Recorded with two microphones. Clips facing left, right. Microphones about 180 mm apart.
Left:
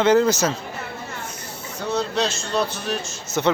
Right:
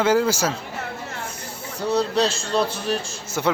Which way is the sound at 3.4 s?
5° right (ahead or behind).